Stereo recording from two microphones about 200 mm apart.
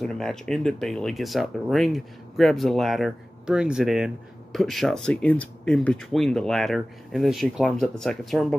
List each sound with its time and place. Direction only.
0.0 s speech: centre (ahead or behind)